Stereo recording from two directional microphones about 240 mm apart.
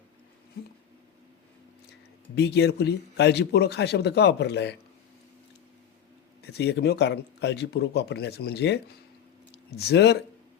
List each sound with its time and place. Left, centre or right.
2.3 s a man's voice: left
6.4 s a man's voice: left